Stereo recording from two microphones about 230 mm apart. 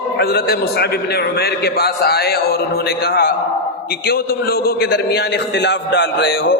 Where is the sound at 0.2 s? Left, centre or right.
Left.